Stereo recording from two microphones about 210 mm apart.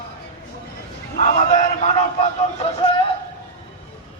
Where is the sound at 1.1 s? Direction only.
35° left (ahead or behind).